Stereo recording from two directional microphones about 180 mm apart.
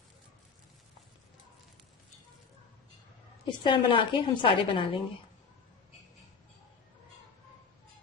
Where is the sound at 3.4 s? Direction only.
25° left (ahead or behind).